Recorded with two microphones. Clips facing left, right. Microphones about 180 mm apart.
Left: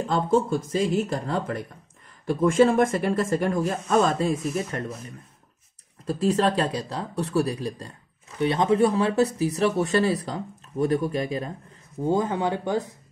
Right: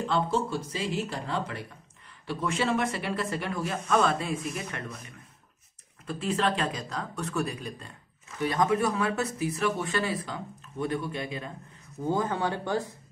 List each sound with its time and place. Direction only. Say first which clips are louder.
0.0 s speech: left 5 dB; 45° left (ahead or behind)
12.1 s speech: left 4 dB; 20° left (ahead or behind)